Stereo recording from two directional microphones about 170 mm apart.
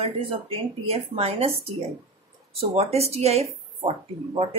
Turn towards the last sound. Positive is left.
turn(degrees=-35)  # may be behind; listen again after turning